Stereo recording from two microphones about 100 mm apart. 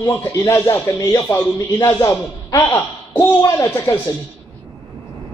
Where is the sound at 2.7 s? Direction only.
20° left (ahead or behind).